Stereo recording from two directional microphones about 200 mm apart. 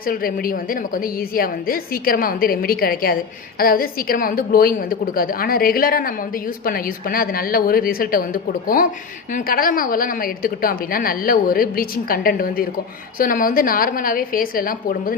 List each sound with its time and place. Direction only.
0.0 s a woman's voice: 45° left (ahead or behind)